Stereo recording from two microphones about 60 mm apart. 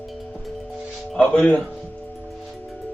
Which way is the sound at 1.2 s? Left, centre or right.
Centre.